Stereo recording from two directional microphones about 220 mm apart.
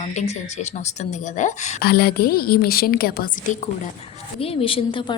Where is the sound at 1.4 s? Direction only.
35° left (ahead or behind).